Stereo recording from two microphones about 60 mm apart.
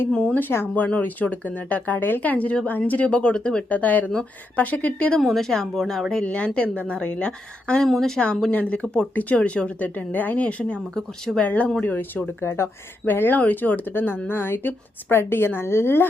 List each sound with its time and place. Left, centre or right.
0.1 s speech: centre
0.3 s a woman's voice: left
0.7 s speech: left
5.2 s speech: centre
7.9 s speech: centre
8.4 s speech: left
12.4 s speech: left
13.1 s a woman's voice: left